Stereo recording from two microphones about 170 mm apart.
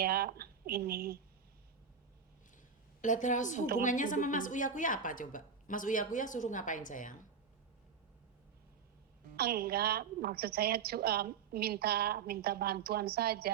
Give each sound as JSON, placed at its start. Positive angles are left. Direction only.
{"t": 0.0, "sound": "speech", "side_deg": -65}
{"t": 3.0, "sound": "a woman's voice", "side_deg": 45}
{"t": 9.3, "sound": "a woman's voice", "side_deg": -65}